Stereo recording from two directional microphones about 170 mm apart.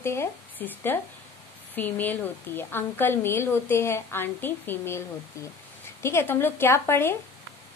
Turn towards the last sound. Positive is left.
turn(degrees=15)  # may be behind; listen again after turning